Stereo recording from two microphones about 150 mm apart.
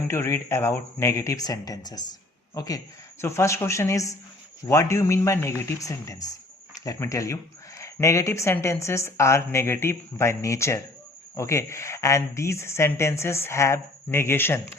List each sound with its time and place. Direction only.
0.1 s speech: 15° left (ahead or behind)